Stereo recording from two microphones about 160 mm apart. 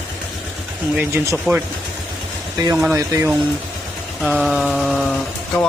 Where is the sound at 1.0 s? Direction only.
15° right (ahead or behind).